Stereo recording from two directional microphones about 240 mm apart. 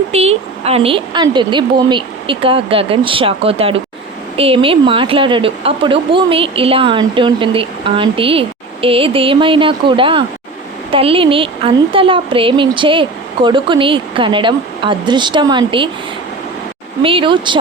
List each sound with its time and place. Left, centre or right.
0.1 s a woman's voice: right
17.0 s a woman's voice: right